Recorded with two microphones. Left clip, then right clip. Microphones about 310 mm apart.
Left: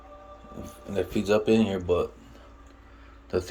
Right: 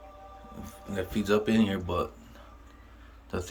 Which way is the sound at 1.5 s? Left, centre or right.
Right.